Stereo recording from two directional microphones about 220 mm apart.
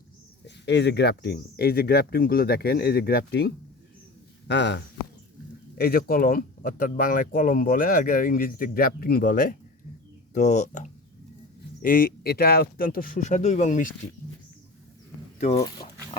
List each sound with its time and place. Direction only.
0.4 s speech: 50° left (ahead or behind); by 13.9 s 35° left (ahead or behind)
15.4 s speech: 30° left (ahead or behind)